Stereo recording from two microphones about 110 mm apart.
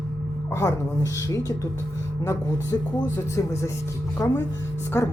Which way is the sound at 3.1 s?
25° left (ahead or behind).